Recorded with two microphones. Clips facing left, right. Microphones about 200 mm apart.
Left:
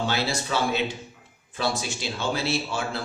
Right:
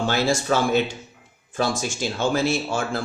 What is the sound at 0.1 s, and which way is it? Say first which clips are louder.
Speech: right 6 dB; 45° right (ahead or behind).